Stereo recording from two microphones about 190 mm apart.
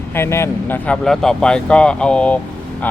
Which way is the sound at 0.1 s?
15° left (ahead or behind).